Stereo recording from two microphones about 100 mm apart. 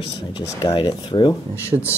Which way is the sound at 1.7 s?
40° right (ahead or behind).